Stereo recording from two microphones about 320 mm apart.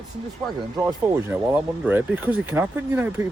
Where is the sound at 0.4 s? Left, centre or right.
Centre.